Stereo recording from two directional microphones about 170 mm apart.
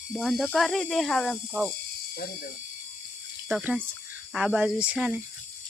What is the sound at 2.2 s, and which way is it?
Speech, 60° left (ahead or behind).